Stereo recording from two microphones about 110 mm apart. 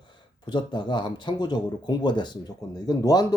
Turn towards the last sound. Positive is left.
turn(degrees=35)  # may be behind; listen again after turning